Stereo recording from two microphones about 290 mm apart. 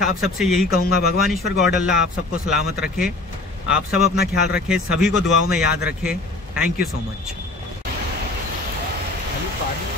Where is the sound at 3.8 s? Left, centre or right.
Left.